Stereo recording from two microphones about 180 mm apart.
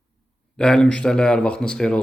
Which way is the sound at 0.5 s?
5° left (ahead or behind).